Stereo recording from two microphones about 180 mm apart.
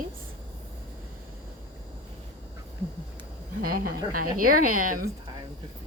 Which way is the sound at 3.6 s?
55° right (ahead or behind).